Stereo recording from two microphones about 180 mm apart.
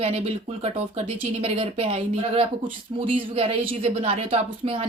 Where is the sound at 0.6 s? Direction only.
35° right (ahead or behind).